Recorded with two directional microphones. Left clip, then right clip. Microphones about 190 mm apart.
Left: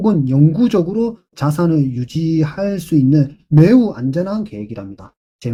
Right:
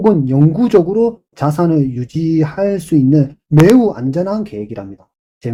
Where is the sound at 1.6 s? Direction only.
40° left (ahead or behind).